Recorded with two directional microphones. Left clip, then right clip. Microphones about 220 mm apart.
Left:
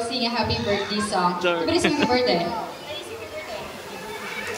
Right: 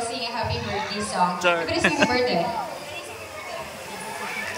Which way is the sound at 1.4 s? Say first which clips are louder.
Even; 5° left (ahead or behind).